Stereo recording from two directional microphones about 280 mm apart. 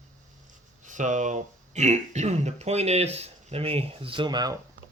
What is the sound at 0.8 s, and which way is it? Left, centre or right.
Speech, right.